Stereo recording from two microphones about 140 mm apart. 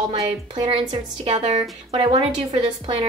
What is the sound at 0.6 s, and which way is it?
A woman's voice, 45° right (ahead or behind).